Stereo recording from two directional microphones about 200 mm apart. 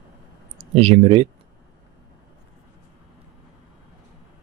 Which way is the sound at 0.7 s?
30° right (ahead or behind).